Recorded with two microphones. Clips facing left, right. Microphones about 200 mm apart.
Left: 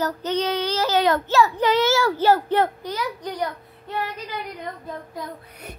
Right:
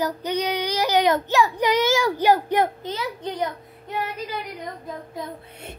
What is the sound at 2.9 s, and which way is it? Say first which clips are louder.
Speech: even; 25° right (ahead or behind).